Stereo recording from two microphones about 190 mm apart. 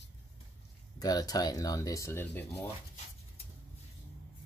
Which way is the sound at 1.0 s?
20° left (ahead or behind).